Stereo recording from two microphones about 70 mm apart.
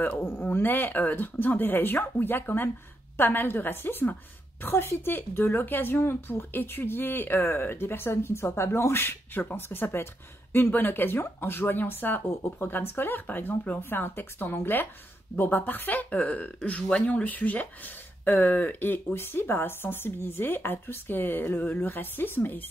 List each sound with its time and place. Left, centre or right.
0.2 s a woman's voice: left